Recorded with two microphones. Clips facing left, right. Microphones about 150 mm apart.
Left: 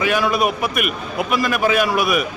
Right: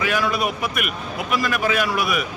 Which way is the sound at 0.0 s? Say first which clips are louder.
Left 4 dB; 20° left (ahead or behind).